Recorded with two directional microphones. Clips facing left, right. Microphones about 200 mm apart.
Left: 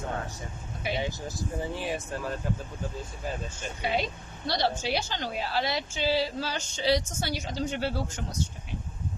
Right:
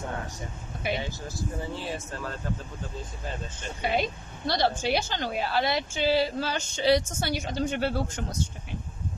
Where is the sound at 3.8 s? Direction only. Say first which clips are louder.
Right 2 dB; 50° right (ahead or behind).